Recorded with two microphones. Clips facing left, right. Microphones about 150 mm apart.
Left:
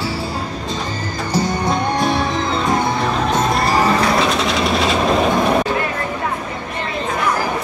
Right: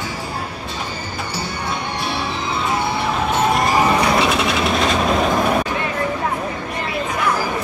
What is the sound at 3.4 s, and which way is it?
Music, 10° right (ahead or behind).